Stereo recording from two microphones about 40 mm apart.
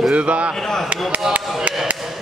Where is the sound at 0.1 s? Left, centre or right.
Right.